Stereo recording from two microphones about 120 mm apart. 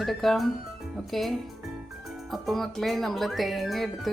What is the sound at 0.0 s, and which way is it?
Speech, centre (ahead or behind).